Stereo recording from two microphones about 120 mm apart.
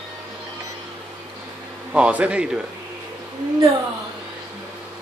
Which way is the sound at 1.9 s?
10° right (ahead or behind).